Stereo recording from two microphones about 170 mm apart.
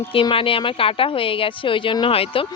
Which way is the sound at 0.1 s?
30° left (ahead or behind).